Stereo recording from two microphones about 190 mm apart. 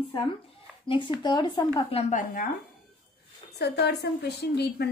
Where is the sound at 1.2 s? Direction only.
20° left (ahead or behind).